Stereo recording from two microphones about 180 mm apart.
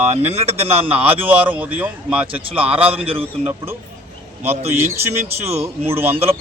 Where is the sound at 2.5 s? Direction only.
30° right (ahead or behind).